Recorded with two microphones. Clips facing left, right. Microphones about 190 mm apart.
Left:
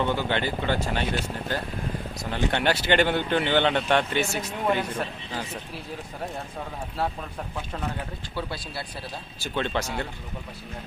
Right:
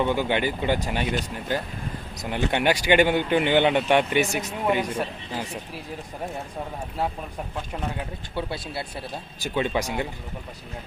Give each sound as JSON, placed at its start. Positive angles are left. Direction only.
{"t": 0.0, "sound": "speech", "side_deg": -15}
{"t": 2.1, "sound": "speech", "side_deg": -15}
{"t": 8.4, "sound": "speech", "side_deg": -25}
{"t": 9.4, "sound": "speech", "side_deg": -10}